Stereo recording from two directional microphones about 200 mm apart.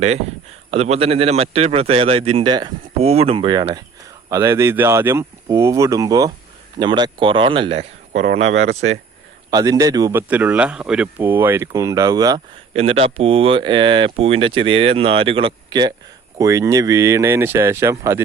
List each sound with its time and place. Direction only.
0.7 s a man's voice: 30° right (ahead or behind)
8.3 s speech: 70° right (ahead or behind)
9.5 s speech: 20° right (ahead or behind)
12.7 s a man's voice: 30° right (ahead or behind); by 18.2 s 15° right (ahead or behind)